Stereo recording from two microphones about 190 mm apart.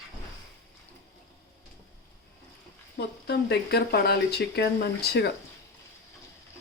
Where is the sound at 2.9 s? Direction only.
60° left (ahead or behind).